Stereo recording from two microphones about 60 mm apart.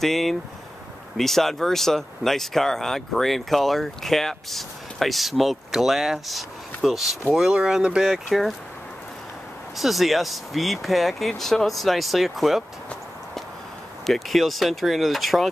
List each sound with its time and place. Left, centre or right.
0.0 s speech: centre
7.5 s speech: centre
9.8 s speech: centre
14.0 s speech: centre